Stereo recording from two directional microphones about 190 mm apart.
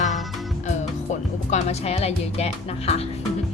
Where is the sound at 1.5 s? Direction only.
35° left (ahead or behind).